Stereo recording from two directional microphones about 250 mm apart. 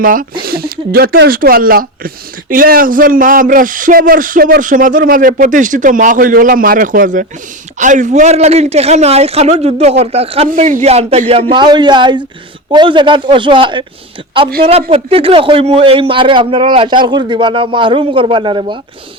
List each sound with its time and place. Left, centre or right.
0.0 s a man's voice: right; by 18.8 s centre